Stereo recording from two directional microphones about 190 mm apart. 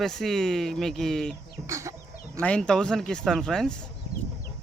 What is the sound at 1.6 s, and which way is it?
Chicken, 15° right (ahead or behind).